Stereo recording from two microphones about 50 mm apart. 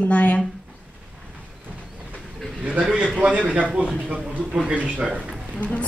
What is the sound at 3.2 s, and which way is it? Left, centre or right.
A man's voice, right.